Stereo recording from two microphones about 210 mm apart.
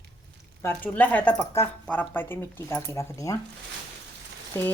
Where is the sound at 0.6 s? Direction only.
10° left (ahead or behind).